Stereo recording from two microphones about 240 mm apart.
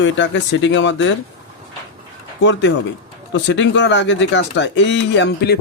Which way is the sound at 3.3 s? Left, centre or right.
Left.